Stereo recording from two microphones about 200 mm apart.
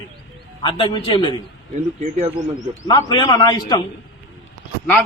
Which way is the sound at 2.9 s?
20° left (ahead or behind).